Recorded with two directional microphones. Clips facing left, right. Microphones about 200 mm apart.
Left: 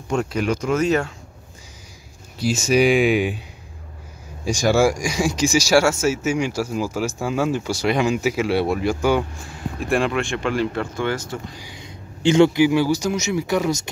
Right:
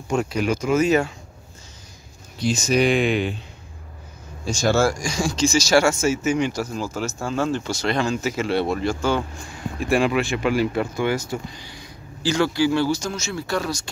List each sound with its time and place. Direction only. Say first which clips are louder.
0.2 s speech: even; centre (ahead or behind)
2.4 s speech: left 2 dB; 10° left (ahead or behind)
4.5 s speech: left 2 dB; 15° left (ahead or behind)
9.8 s speech: right 1 dB; centre (ahead or behind)
11.5 s a man's voice: left 2 dB; 15° left (ahead or behind)